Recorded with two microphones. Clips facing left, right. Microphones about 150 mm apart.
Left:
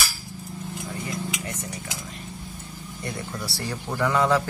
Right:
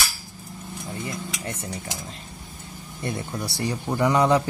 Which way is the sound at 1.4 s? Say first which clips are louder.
Right 1 dB; 30° right (ahead or behind).